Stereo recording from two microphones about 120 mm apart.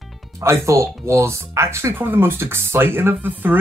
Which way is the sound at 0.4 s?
25° right (ahead or behind).